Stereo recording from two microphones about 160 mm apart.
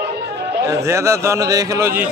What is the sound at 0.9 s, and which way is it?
A man's voice, 15° right (ahead or behind).